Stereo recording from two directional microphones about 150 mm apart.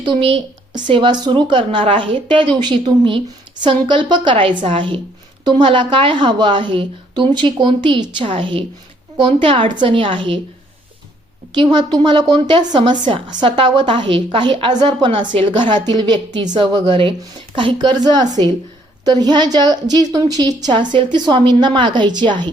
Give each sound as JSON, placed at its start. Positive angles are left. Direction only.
{"t": 0.0, "sound": "a woman's voice", "side_deg": -35}
{"t": 11.5, "sound": "a woman's voice", "side_deg": -30}